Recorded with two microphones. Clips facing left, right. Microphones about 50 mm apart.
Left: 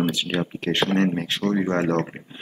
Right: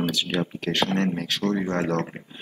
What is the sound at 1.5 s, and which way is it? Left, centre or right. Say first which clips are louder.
Speech: left 3 dB; centre.